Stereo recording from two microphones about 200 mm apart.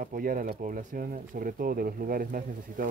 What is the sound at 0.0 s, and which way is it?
Speech, 45° right (ahead or behind).